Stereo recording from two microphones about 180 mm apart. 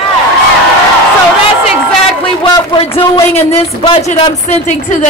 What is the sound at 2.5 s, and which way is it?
A man's voice, 25° left (ahead or behind).